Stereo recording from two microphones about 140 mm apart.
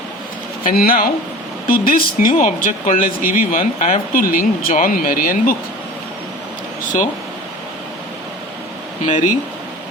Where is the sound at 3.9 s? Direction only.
85° left.